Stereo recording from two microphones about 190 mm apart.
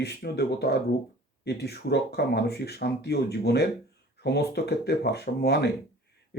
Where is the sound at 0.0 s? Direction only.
60° left (ahead or behind).